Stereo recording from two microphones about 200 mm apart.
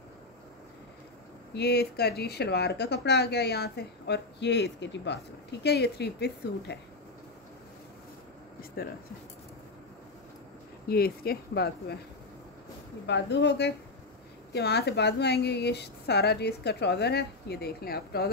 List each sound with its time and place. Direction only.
1.5 s speech: 55° left (ahead or behind)
8.8 s speech: 45° left (ahead or behind)
10.9 s speech: 50° left (ahead or behind)
13.0 s speech: 60° left (ahead or behind)